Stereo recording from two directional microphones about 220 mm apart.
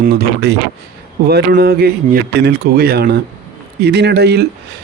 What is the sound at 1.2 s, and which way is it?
A man's voice, 45° right (ahead or behind).